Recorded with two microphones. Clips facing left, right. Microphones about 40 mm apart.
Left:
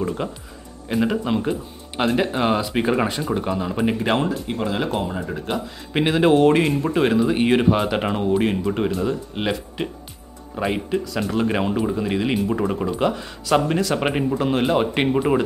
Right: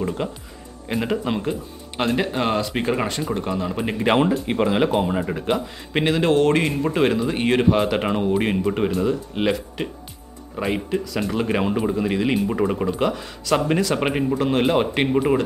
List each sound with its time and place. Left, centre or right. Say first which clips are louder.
0.2 s speech: even; centre
4.2 s speech: right 4 dB; right
4.6 s speech: right 4 dB; right
6.0 s speech: left 2 dB; centre
12.8 s speech: even; centre